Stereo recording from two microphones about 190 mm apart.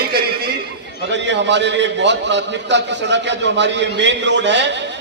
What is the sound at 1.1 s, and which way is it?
A man's voice, 70° right (ahead or behind).